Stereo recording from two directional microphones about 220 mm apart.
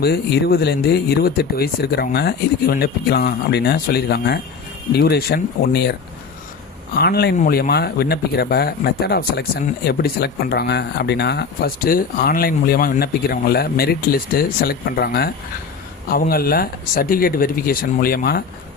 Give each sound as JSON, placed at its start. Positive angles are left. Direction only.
{"t": 0.0, "sound": "speech", "side_deg": 45}